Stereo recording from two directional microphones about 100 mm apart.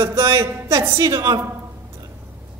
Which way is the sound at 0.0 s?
25° right (ahead or behind).